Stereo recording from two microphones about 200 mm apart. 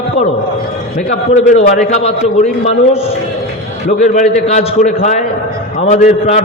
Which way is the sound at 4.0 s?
35° left (ahead or behind).